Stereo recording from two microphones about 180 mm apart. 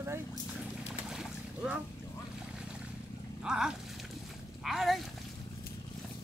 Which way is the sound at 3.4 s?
5° right (ahead or behind).